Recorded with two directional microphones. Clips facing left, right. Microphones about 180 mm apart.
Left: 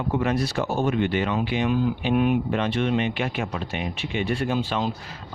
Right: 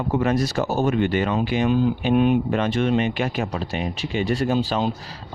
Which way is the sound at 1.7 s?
30° right (ahead or behind).